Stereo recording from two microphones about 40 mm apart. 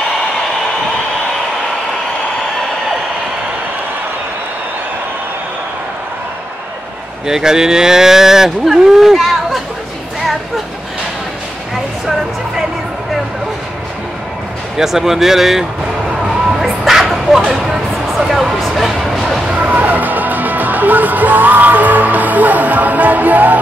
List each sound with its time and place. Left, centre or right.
7.2 s speech: centre
12.1 s music: centre
14.8 s speech: centre
16.1 s dog: centre
17.6 s a sound: centre
19.6 s music: right